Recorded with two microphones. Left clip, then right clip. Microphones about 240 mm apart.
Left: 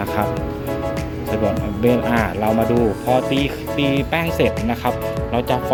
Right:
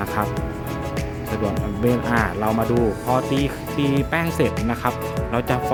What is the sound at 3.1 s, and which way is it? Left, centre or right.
Speech, centre.